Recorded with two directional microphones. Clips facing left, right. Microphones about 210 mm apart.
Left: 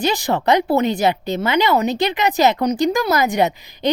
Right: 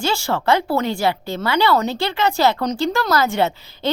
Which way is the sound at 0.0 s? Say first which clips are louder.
Left 2 dB; 15° left (ahead or behind).